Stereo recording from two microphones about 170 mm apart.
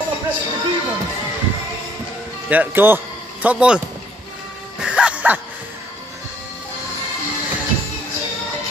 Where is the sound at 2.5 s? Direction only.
10° right (ahead or behind).